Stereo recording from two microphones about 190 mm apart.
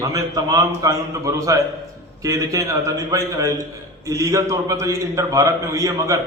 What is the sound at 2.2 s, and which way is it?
A man's voice, 15° right (ahead or behind).